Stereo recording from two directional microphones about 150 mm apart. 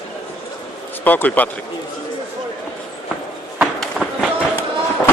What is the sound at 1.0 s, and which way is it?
Speech, 10° left (ahead or behind).